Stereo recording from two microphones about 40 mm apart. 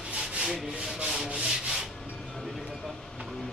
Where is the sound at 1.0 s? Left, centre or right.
Centre.